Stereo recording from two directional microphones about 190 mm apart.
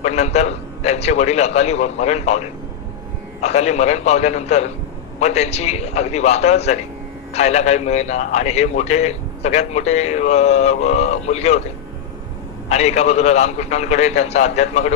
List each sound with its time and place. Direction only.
0.0 s a man's voice: 35° left (ahead or behind)
12.6 s a man's voice: 35° left (ahead or behind)